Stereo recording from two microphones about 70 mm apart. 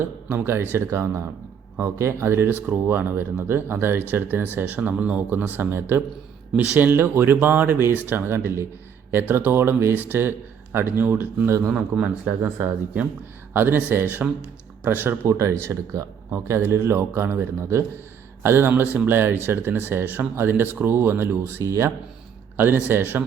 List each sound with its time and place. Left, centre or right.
0.3 s speech: right
11.7 s a man's voice: centre
12.2 s speech: centre; by 21.6 s right
21.6 s speech: right
22.5 s speech: right